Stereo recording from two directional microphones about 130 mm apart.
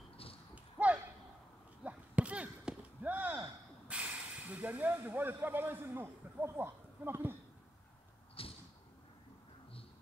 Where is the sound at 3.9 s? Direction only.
10° right (ahead or behind).